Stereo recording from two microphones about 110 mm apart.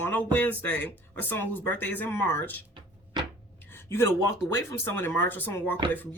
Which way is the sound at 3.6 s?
20° left (ahead or behind).